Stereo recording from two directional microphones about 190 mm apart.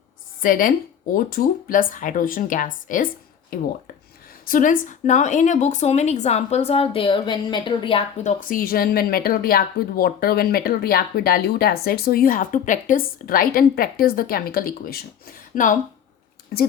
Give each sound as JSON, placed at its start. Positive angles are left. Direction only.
{"t": 0.4, "sound": "a woman's voice", "side_deg": 45}
{"t": 8.4, "sound": "a woman's voice", "side_deg": 45}